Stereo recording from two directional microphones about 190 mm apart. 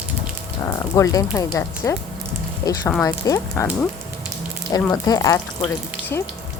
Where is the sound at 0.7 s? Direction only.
15° left (ahead or behind).